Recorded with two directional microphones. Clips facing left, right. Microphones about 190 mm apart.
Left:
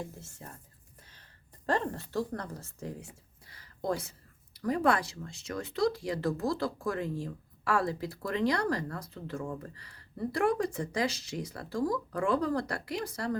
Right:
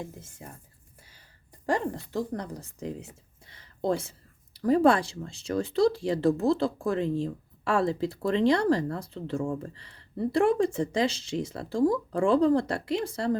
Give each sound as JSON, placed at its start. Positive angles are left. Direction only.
{"t": 0.0, "sound": "a woman's voice", "side_deg": -15}